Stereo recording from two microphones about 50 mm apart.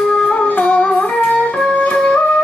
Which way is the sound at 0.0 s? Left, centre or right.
Centre.